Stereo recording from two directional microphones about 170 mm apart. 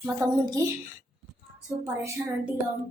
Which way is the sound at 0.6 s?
20° right (ahead or behind).